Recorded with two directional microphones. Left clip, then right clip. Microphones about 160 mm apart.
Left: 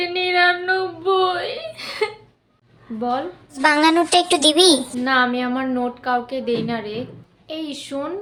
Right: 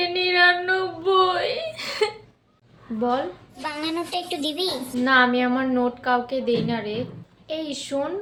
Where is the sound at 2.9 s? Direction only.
20° left (ahead or behind).